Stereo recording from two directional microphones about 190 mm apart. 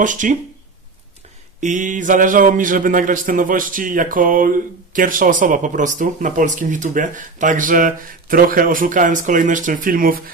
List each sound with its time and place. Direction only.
0.0 s speech: 40° right (ahead or behind)
1.6 s speech: 40° right (ahead or behind)